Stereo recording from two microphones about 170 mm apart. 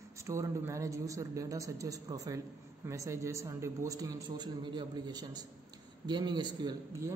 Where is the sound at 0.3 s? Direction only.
15° right (ahead or behind).